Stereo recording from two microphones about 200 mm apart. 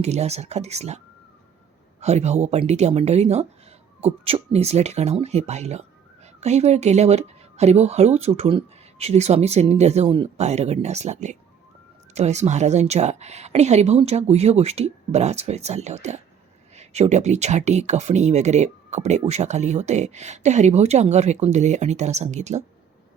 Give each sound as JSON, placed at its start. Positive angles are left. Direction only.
{"t": 0.0, "sound": "speech", "side_deg": -35}